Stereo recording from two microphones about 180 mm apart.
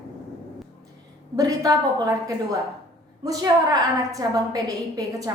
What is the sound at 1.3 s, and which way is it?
A woman's voice, 20° right (ahead or behind).